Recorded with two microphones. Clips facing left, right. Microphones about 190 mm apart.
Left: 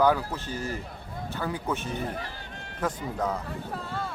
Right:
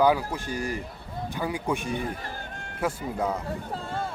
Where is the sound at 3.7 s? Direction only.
25° right (ahead or behind).